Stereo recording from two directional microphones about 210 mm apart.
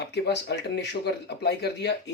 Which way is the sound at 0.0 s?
55° left (ahead or behind).